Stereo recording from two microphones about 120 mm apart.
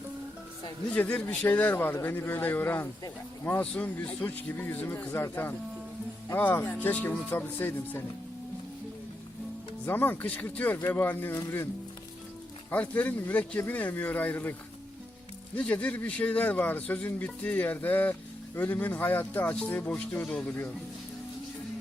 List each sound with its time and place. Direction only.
0.9 s a man's voice: 10° left (ahead or behind)
9.8 s a man's voice: 15° left (ahead or behind)
12.7 s a man's voice: 15° left (ahead or behind)
15.5 s a man's voice: 10° left (ahead or behind)